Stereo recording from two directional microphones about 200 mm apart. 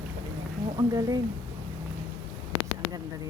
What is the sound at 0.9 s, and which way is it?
Speech, 20° right (ahead or behind).